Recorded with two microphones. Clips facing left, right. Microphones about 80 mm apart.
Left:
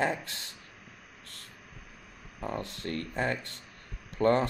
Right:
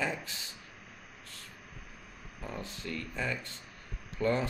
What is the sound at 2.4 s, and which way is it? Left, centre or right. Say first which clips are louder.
Speech: left 6 dB; left.